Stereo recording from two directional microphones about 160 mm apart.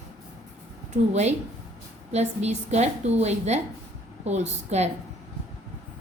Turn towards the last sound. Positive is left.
turn(degrees=-45)  # may be behind; listen again after turning